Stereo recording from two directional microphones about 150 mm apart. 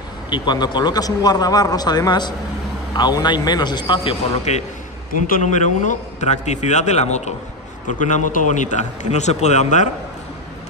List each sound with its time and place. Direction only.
0.3 s a man's voice: 30° left (ahead or behind)
4.5 s a man's voice: 50° left (ahead or behind)